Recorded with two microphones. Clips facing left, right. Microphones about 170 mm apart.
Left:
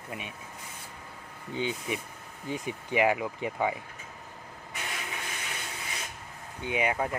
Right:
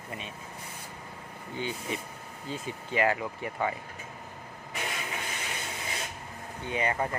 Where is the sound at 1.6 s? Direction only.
20° left (ahead or behind).